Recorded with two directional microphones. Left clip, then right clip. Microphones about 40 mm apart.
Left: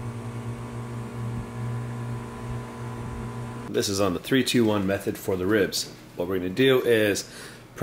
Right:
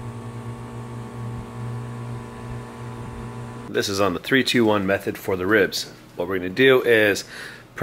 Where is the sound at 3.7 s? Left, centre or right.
Right.